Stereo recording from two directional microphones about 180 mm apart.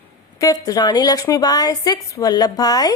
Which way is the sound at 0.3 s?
20° left (ahead or behind).